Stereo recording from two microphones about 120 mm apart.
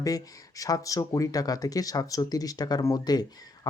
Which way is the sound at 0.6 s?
30° left (ahead or behind).